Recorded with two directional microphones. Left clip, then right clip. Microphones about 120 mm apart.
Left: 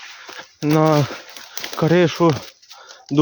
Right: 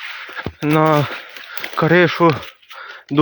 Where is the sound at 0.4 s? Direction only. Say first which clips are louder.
Right 10 dB; 25° left (ahead or behind).